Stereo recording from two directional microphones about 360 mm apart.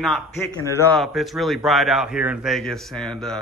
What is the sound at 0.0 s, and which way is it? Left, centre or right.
A man's voice, centre.